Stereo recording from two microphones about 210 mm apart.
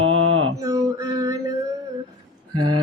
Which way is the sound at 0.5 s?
15° right (ahead or behind).